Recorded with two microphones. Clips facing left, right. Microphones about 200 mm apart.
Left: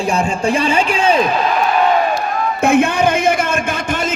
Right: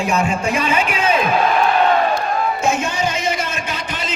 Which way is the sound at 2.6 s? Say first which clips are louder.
Left 7 dB; 60° left (ahead or behind).